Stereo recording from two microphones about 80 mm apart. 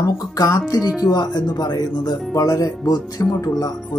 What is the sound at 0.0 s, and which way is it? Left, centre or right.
Speech, left.